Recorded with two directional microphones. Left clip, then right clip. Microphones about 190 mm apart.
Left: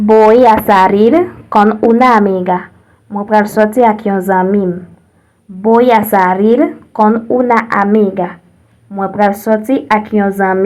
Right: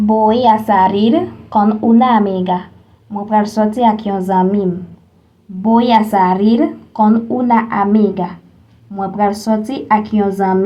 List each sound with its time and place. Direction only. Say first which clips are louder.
0.0 s a woman's voice: left 6 dB; 40° left (ahead or behind)